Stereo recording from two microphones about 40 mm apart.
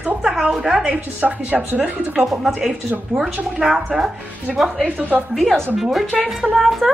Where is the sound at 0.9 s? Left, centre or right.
Right.